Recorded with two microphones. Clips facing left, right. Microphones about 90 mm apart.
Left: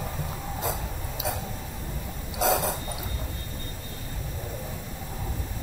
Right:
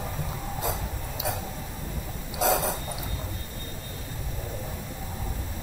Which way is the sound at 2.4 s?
65° left (ahead or behind).